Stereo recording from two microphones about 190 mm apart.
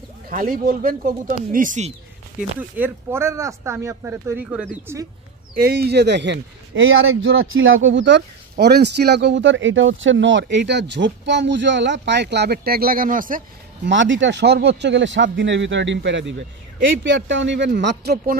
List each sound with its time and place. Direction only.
0.3 s speech: 45° right (ahead or behind)
2.8 s speech: 15° right (ahead or behind)
5.5 s speech: 55° right (ahead or behind)
13.8 s speech: 80° right; by 18.3 s 60° right (ahead or behind)